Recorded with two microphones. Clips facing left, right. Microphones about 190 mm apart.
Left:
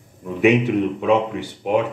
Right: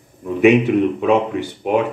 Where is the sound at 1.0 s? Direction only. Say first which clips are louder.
Right 2 dB; 55° right (ahead or behind).